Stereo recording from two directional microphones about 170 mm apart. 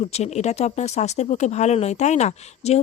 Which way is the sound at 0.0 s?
40° left (ahead or behind).